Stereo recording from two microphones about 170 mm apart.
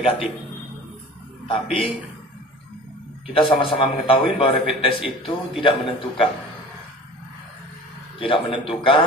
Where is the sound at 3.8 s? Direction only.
30° left (ahead or behind).